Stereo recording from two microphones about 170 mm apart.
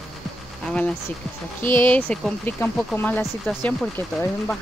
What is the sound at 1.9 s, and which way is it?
Speech, 5° left (ahead or behind).